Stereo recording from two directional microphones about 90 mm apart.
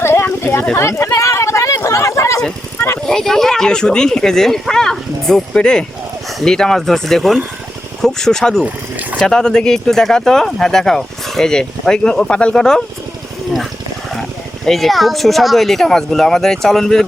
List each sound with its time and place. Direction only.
0.0 s a sound: 30° left (ahead or behind)
0.8 s a sound: 30° left (ahead or behind)
3.1 s speech: 5° left (ahead or behind)
8.6 s speech: 15° right (ahead or behind)
9.2 s speech: 10° left (ahead or behind)
14.2 s speech: 5° left (ahead or behind)